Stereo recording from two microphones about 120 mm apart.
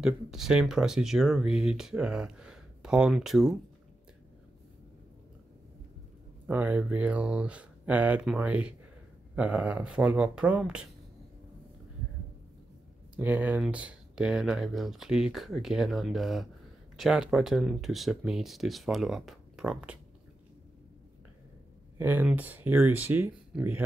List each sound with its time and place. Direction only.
0.0 s speech: 5° right (ahead or behind)
6.4 s speech: 15° right (ahead or behind)
13.1 s speech: 15° right (ahead or behind)
21.9 s speech: 15° right (ahead or behind)